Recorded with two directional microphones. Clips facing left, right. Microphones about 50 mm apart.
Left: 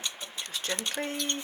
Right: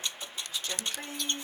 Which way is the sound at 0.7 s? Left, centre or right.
Left.